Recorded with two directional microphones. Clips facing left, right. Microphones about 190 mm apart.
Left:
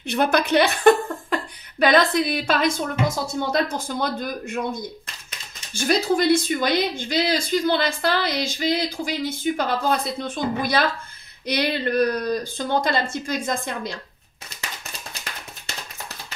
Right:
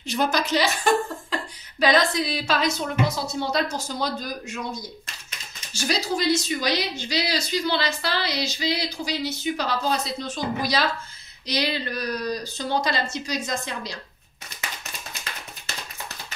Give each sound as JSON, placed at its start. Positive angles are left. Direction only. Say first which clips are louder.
{"t": 0.0, "sound": "a woman's voice", "louder": "left 4 dB", "side_deg": 60}